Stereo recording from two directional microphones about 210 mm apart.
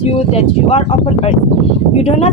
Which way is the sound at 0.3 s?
30° left (ahead or behind).